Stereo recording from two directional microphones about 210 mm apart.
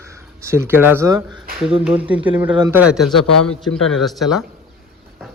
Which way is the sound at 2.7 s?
5° right (ahead or behind).